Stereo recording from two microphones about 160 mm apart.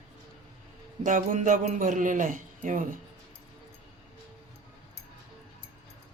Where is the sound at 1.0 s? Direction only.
55° right (ahead or behind).